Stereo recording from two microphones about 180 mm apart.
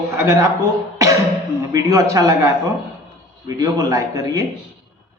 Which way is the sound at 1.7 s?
20° right (ahead or behind).